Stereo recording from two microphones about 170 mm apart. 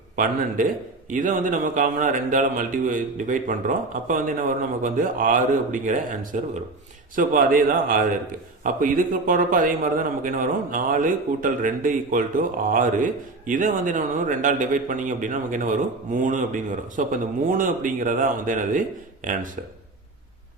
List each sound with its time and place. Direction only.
0.2 s a man's voice: 50° right (ahead or behind)